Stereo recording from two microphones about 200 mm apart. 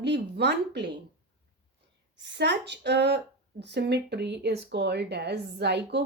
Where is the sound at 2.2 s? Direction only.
60° right (ahead or behind).